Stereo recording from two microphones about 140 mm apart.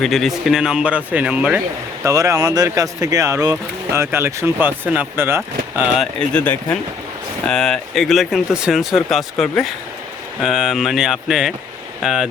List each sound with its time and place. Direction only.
0.0 s speech: centre (ahead or behind)
2.0 s speech: 20° right (ahead or behind)
6.0 s speech: 5° left (ahead or behind)